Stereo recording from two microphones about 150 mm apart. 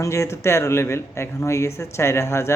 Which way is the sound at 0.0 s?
20° left (ahead or behind).